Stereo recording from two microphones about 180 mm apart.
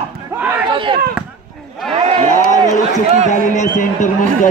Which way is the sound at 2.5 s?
40° left (ahead or behind).